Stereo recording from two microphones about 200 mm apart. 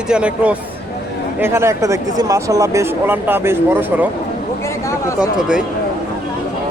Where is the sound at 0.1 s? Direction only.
5° right (ahead or behind).